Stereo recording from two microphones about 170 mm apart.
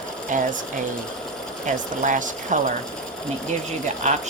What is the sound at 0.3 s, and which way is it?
Speech, 50° right (ahead or behind).